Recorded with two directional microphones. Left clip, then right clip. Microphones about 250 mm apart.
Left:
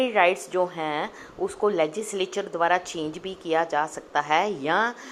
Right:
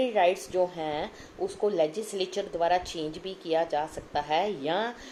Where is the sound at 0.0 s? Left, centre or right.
Centre.